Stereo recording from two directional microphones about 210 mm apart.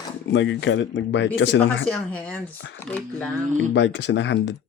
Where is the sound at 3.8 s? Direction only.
60° left (ahead or behind).